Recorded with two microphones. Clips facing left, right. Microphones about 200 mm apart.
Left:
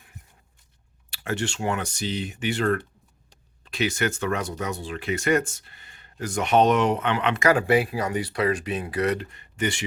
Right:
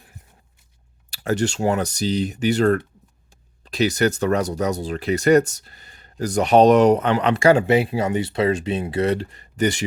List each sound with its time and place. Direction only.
1.1 s speech: 40° right (ahead or behind)